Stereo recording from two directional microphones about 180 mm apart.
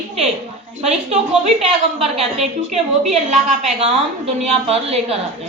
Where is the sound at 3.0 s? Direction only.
40° right (ahead or behind).